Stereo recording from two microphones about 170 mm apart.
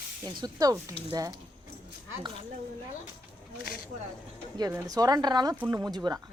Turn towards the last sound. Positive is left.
turn(degrees=-20)  # may be behind; listen again after turning